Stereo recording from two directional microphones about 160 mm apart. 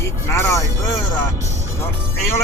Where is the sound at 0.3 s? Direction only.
15° left (ahead or behind).